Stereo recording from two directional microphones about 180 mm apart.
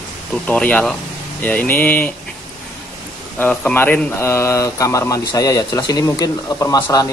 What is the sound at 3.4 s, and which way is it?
Speech, 5° left (ahead or behind).